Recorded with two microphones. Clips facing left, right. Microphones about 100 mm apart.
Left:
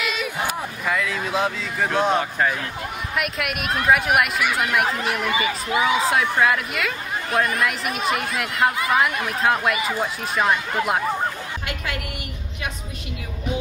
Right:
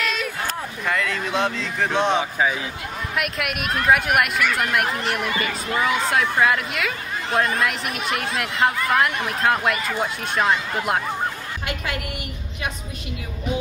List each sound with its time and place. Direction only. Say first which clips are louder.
0.0 s a sound: right 1 dB; 5° left (ahead or behind)
0.8 s speech: even; 5° left (ahead or behind)
11.6 s a woman's voice: right 3 dB; 25° right (ahead or behind)